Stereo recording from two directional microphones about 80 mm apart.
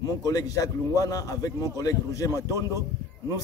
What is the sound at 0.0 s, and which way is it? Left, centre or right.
A man's voice, left.